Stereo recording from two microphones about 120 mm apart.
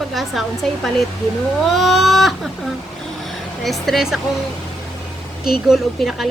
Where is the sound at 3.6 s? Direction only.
Centre (ahead or behind).